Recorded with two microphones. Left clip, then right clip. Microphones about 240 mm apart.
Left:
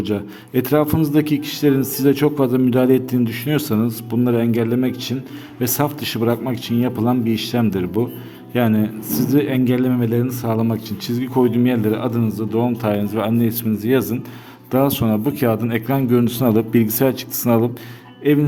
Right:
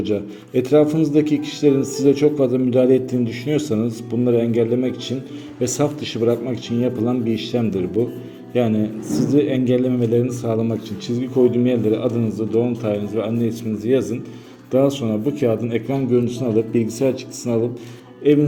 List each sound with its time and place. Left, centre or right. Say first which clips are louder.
0.0 s a man's voice: right 1 dB; left